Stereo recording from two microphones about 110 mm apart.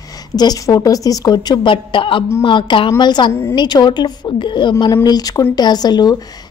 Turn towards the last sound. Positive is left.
turn(degrees=40)  # may be behind; listen again after turning